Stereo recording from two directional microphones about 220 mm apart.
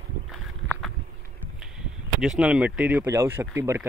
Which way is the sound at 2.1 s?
5° right (ahead or behind).